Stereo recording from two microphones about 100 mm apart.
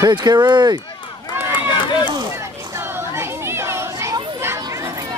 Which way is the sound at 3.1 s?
25° right (ahead or behind).